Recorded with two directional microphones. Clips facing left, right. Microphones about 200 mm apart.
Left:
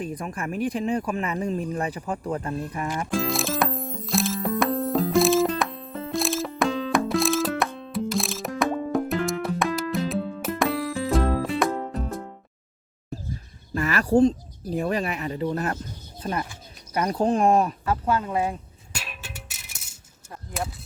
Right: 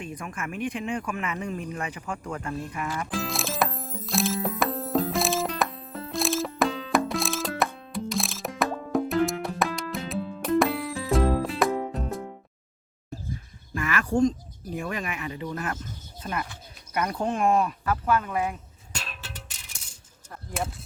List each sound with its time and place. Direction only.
0.0 s speech: 35° left (ahead or behind)
3.1 s music: centre (ahead or behind)
13.7 s a sound: 35° left (ahead or behind)
14.7 s speech: 35° left (ahead or behind)
17.9 s speech: 25° left (ahead or behind)
18.9 s music: 10° left (ahead or behind)